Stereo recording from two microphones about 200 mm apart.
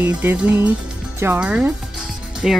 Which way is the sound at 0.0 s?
10° right (ahead or behind).